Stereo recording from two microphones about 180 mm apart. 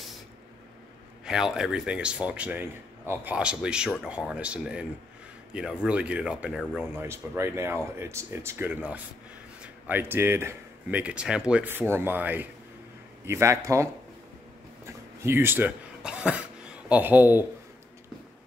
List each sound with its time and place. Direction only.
1.2 s speech: 5° right (ahead or behind)
15.2 s speech: 10° right (ahead or behind)